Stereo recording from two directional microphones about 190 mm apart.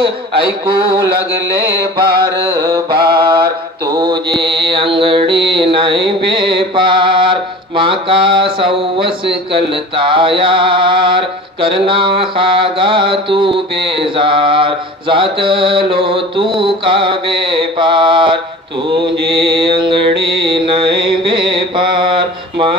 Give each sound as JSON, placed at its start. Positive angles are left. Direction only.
{"t": 2.5, "sound": "speech", "side_deg": -20}
{"t": 3.3, "sound": "mantra", "side_deg": -20}
{"t": 8.5, "sound": "speech", "side_deg": -25}
{"t": 20.2, "sound": "mantra", "side_deg": -25}